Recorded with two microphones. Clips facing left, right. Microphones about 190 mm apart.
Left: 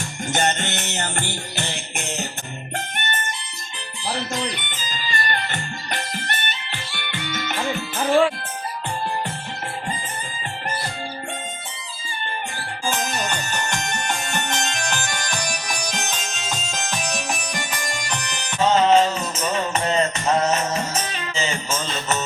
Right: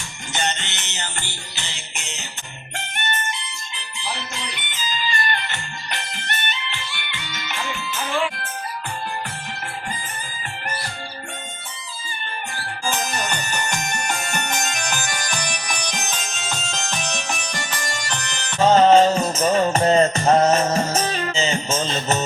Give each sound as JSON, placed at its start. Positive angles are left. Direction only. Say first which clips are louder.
{"t": 0.3, "sound": "music", "louder": "left 4 dB", "side_deg": 50}
{"t": 3.8, "sound": "music", "louder": "left 4 dB", "side_deg": 45}
{"t": 12.9, "sound": "music", "louder": "even", "side_deg": 0}
{"t": 17.7, "sound": "music", "louder": "even", "side_deg": 10}
{"t": 18.6, "sound": "music", "louder": "right 3 dB", "side_deg": -40}
{"t": 21.3, "sound": "music", "louder": "even", "side_deg": -25}